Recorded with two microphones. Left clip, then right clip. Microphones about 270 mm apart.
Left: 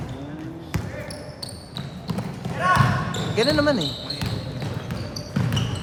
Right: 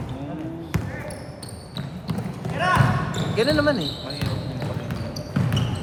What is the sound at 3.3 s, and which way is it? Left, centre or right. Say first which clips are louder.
Speech: even; left.